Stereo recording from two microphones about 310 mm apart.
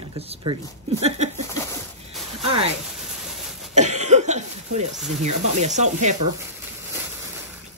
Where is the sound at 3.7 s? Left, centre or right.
Right.